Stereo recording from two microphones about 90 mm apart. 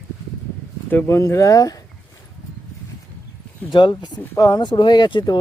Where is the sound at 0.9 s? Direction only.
25° left (ahead or behind); by 1.8 s 45° left (ahead or behind).